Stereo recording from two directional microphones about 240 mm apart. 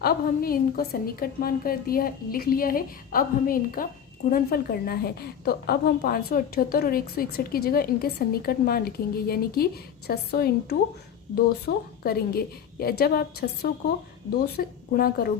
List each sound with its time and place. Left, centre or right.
0.0 s a woman's voice: left